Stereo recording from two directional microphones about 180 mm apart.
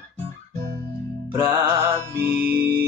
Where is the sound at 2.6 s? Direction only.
60° right (ahead or behind).